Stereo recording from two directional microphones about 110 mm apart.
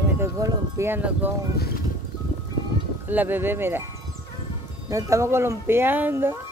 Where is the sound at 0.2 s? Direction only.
25° right (ahead or behind).